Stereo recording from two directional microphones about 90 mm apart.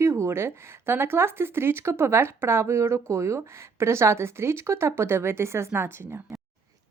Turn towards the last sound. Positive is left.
turn(degrees=-25)  # may be behind; listen again after turning